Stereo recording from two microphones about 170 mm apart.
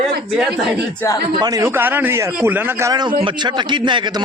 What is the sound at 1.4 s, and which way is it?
A man's voice, 20° right (ahead or behind).